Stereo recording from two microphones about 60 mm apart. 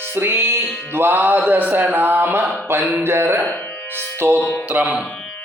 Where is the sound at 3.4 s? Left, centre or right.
Left.